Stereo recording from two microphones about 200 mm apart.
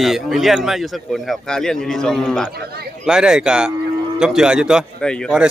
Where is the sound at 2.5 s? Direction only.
50° right (ahead or behind).